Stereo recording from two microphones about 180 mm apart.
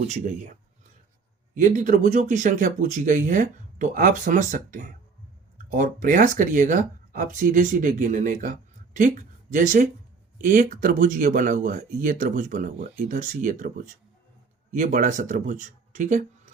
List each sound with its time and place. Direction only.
0.1 s speech: 40° right (ahead or behind)
1.5 s speech: 45° right (ahead or behind)